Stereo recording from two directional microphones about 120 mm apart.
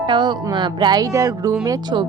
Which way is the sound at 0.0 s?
40° right (ahead or behind).